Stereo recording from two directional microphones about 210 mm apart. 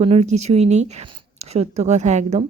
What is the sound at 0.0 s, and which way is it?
Speech, 30° right (ahead or behind).